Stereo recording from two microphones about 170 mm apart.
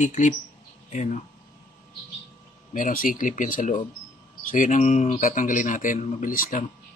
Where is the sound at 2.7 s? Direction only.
55° left (ahead or behind).